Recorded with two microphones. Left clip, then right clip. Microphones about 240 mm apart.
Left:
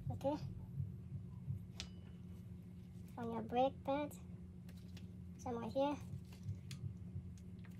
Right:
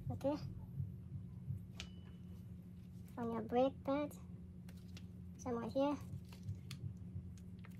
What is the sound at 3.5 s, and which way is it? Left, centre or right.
Speech, right.